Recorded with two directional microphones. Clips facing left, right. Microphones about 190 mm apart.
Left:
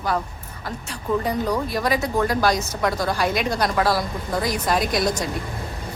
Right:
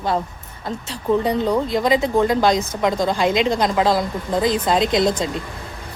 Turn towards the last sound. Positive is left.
turn(degrees=-25)  # may be behind; listen again after turning